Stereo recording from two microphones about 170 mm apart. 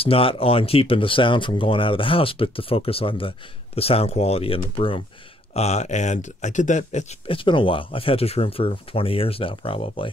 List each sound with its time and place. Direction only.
0.0 s speech: 35° left (ahead or behind)